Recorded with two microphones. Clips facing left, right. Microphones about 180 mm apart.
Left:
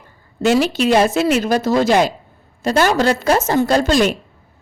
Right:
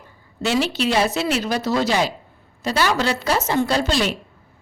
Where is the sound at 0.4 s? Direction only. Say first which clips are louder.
Left 6 dB; 45° left (ahead or behind).